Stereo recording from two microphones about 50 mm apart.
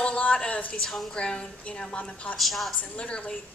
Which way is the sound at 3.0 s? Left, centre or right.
Centre.